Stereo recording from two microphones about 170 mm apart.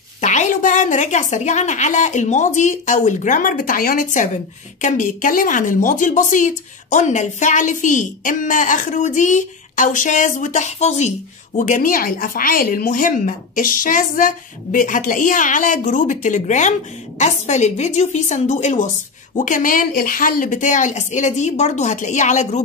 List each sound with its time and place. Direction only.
0.2 s a woman's voice: 45° left (ahead or behind)